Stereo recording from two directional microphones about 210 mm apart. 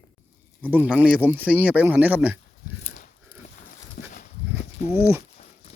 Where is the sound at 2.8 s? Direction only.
40° left (ahead or behind).